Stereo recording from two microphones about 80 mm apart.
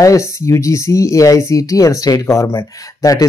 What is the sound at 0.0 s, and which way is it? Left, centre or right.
Speech, left.